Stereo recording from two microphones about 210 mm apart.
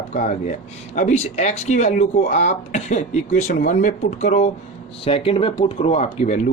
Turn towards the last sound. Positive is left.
turn(degrees=35)  # may be behind; listen again after turning